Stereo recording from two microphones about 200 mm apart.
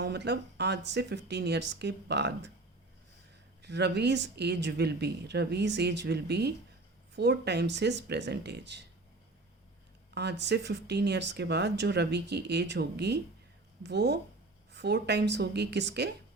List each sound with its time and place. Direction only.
0.0 s speech: 55° right (ahead or behind)
3.6 s speech: 60° right (ahead or behind)
10.2 s speech: 60° right (ahead or behind)